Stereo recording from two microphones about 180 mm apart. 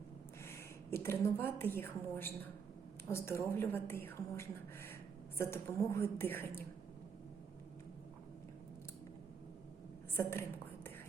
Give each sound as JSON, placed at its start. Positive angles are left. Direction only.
{"t": 0.4, "sound": "a woman's voice", "side_deg": 15}
{"t": 10.2, "sound": "whispering", "side_deg": 15}